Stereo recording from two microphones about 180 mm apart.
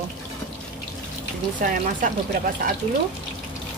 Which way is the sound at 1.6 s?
50° right (ahead or behind).